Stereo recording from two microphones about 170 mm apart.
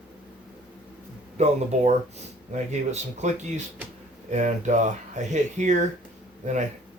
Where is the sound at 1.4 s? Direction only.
40° right (ahead or behind).